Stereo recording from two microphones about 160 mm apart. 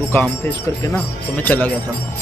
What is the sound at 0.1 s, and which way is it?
Speech, 15° left (ahead or behind).